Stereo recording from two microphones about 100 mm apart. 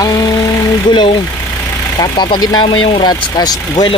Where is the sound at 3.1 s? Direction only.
40° left (ahead or behind).